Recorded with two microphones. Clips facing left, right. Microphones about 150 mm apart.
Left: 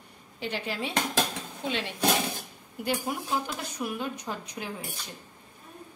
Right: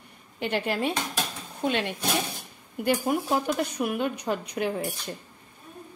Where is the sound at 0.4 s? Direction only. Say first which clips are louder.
Right 6 dB; 55° right (ahead or behind).